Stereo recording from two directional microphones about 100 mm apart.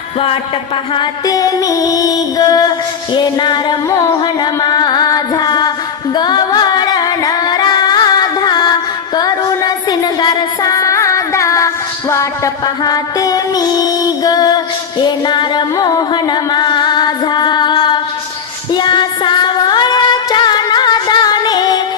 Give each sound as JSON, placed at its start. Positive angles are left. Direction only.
{"t": 1.2, "sound": "music", "side_deg": 35}
{"t": 12.6, "sound": "music", "side_deg": 40}